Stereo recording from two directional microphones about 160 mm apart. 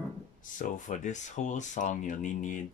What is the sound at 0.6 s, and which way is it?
Speech, 50° left (ahead or behind).